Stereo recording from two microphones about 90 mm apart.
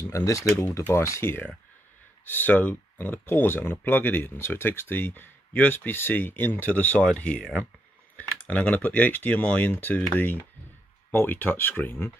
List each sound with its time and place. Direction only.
0.1 s speech: 35° left (ahead or behind)